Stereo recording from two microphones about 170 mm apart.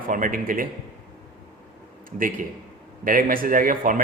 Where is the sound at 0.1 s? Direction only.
55° right (ahead or behind).